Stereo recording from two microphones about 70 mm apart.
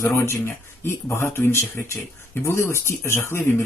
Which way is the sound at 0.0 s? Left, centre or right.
Left.